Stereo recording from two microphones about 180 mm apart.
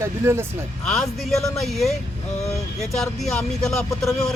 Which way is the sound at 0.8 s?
Centre (ahead or behind).